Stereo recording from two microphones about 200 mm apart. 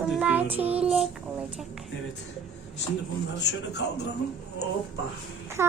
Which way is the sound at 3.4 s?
60° left (ahead or behind).